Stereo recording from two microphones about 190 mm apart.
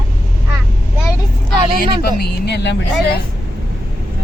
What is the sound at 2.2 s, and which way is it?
Speech, 60° left (ahead or behind).